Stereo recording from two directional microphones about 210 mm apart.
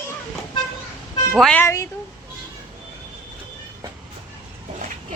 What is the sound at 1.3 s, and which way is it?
Speech, 5° left (ahead or behind).